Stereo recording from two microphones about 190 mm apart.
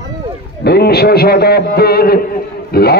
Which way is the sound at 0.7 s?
55° left (ahead or behind).